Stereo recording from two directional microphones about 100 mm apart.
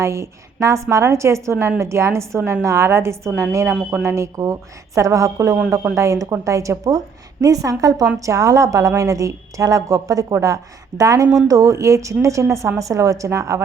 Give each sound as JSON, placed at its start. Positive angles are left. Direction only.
{"t": 0.0, "sound": "a woman's voice", "side_deg": -30}